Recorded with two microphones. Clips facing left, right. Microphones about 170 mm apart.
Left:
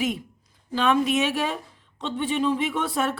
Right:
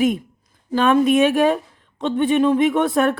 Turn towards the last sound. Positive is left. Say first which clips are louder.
# right 9 dB
turn(degrees=-60)  # may be behind; listen again after turning